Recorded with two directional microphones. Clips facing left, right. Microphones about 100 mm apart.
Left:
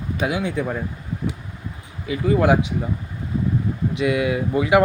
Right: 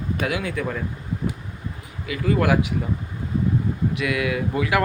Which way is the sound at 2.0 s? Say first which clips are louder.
Left 3 dB; 25° left (ahead or behind).